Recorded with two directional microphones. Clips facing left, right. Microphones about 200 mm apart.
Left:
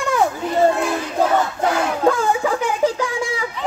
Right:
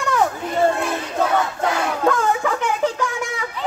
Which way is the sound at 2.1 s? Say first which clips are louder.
Left 1 dB; 30° left (ahead or behind).